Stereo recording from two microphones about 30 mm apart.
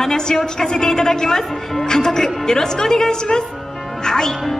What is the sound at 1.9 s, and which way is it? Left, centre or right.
A woman's voice, left.